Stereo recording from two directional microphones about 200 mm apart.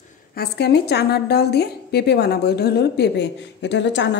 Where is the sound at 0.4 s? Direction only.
55° left (ahead or behind).